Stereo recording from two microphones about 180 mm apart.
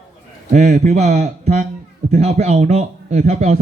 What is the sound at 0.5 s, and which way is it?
Speech, 40° right (ahead or behind).